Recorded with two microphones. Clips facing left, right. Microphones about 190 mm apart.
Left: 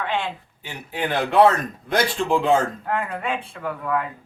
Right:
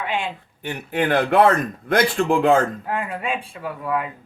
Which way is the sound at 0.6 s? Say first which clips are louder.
Right 5 dB; 60° right (ahead or behind).